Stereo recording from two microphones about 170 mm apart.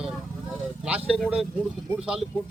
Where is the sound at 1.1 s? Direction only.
5° right (ahead or behind).